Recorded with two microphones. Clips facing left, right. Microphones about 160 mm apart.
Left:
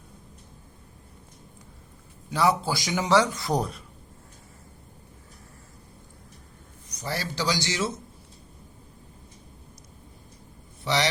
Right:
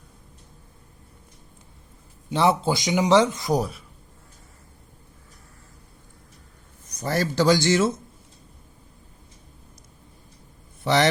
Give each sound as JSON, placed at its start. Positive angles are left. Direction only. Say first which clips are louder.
{"t": 2.3, "sound": "a man's voice", "louder": "right 3 dB", "side_deg": -25}
{"t": 6.8, "sound": "a man's voice", "louder": "right 7 dB", "side_deg": -50}
{"t": 10.8, "sound": "a man's voice", "louder": "right 6 dB", "side_deg": -55}